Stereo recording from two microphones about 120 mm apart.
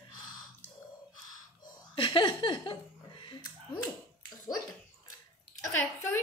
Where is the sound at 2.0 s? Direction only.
40° left (ahead or behind).